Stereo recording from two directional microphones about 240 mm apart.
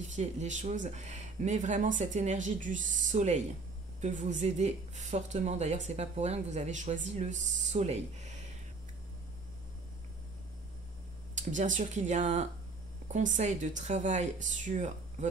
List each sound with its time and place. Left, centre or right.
0.1 s speech: right
11.3 s speech: right